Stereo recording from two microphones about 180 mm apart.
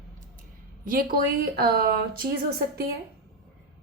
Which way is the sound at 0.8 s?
55° right (ahead or behind).